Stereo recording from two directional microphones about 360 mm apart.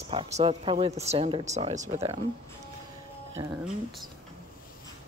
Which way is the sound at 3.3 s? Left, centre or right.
Centre.